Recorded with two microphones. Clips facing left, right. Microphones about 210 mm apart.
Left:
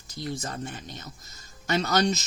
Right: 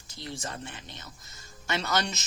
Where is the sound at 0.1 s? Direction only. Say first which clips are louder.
Left 5 dB; 40° left (ahead or behind).